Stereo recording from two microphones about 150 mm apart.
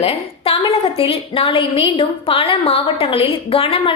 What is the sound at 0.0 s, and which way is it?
A woman's voice, 40° left (ahead or behind).